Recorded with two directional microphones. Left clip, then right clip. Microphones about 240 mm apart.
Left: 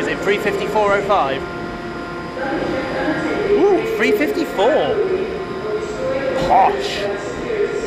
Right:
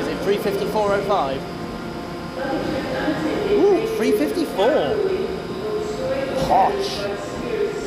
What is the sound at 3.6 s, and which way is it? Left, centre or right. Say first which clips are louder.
Speech: left 1 dB; centre.